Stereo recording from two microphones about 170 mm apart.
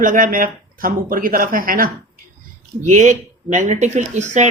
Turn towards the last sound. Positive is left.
turn(degrees=-45)  # may be behind; listen again after turning